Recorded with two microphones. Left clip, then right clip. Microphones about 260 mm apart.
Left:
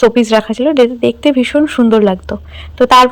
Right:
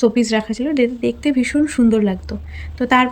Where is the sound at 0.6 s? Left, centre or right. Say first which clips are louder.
Left 7 dB; left.